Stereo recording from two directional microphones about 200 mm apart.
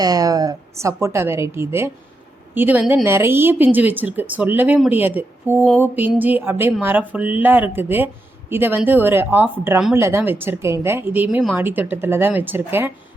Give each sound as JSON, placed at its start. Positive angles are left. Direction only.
{"t": 0.0, "sound": "speech", "side_deg": -20}